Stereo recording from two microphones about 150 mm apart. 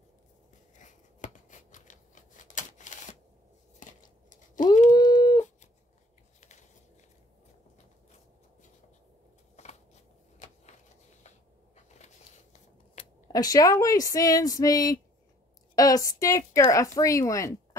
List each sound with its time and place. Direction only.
0.7 s scissors: 55° left (ahead or behind)
3.8 s biting: 60° left (ahead or behind)
4.9 s dog: 30° left (ahead or behind)
9.6 s a sound: 45° left (ahead or behind)
10.4 s vehicle: 50° left (ahead or behind)
11.2 s a sound: 50° left (ahead or behind)
13.3 s a woman's voice: 25° left (ahead or behind)